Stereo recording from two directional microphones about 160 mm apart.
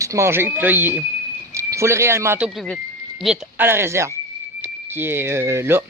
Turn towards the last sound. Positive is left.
turn(degrees=-15)  # may be behind; listen again after turning